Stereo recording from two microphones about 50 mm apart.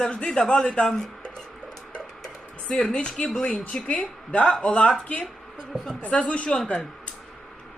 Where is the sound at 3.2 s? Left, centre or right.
Centre.